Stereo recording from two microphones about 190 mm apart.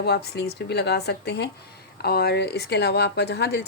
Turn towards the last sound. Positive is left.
turn(degrees=60)  # may be behind; listen again after turning